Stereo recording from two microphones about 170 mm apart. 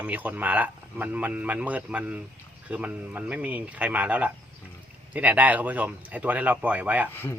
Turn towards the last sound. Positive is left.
turn(degrees=15)  # may be behind; listen again after turning